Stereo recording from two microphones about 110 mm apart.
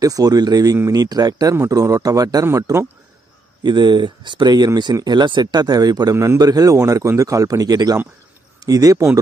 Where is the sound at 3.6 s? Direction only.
40° right (ahead or behind).